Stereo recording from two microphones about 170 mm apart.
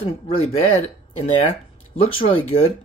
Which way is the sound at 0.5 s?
40° left (ahead or behind).